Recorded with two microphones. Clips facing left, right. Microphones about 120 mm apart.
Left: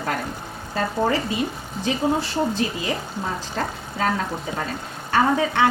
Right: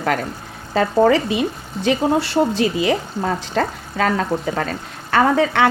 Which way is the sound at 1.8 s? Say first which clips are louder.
Right 5 dB; 80° right.